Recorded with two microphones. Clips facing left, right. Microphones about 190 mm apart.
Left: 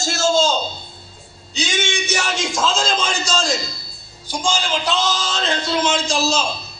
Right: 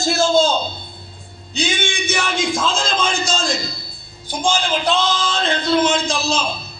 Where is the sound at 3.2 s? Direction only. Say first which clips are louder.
Even; 55° right (ahead or behind).